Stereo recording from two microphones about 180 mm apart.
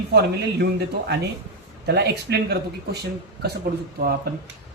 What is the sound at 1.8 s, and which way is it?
Speech, 65° right (ahead or behind).